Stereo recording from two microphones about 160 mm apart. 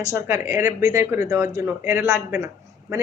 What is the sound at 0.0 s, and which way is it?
A woman's voice, 20° right (ahead or behind).